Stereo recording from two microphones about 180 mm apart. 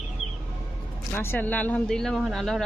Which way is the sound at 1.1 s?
10° left (ahead or behind).